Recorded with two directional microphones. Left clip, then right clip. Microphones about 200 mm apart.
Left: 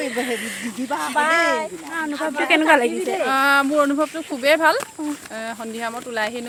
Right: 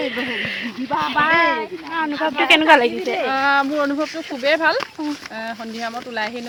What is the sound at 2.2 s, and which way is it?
Speech, 5° right (ahead or behind).